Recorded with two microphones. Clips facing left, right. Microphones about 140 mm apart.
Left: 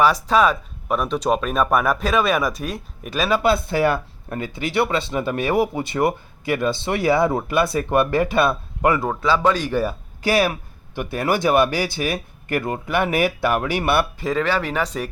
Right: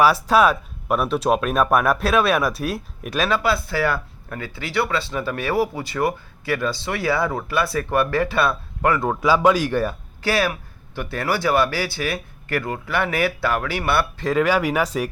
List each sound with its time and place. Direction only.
0.0 s speech: 5° right (ahead or behind)
3.3 s speech: 20° left (ahead or behind)
9.2 s speech: 10° right (ahead or behind)
10.2 s speech: 15° left (ahead or behind)
14.3 s speech: 10° right (ahead or behind)